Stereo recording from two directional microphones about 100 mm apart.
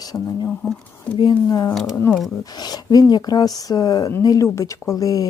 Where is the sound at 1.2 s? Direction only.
45° left (ahead or behind).